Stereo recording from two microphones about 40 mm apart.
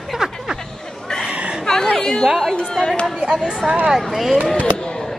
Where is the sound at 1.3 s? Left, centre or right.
Right.